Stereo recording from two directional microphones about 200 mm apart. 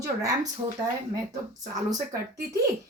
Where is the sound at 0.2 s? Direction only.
15° right (ahead or behind).